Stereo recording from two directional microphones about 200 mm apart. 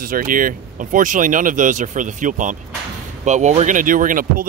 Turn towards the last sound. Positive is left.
turn(degrees=-45)  # may be behind; listen again after turning